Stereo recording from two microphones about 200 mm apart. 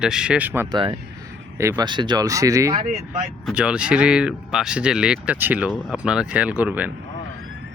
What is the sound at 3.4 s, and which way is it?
Speech, 5° right (ahead or behind).